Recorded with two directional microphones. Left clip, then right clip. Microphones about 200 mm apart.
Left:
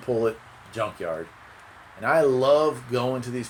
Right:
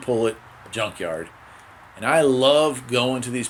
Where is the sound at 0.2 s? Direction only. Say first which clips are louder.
Right 2 dB; 25° right (ahead or behind).